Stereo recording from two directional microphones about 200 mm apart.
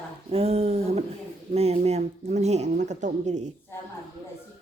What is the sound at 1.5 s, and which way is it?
Speech, 30° right (ahead or behind).